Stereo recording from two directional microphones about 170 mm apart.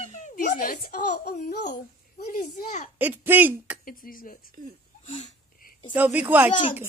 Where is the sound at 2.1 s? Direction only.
45° left (ahead or behind).